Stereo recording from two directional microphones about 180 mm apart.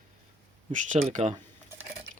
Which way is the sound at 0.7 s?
40° right (ahead or behind).